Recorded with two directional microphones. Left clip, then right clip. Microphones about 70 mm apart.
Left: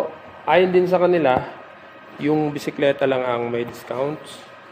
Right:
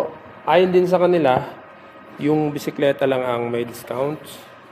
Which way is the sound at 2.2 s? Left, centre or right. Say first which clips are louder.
Right 1 dB; centre.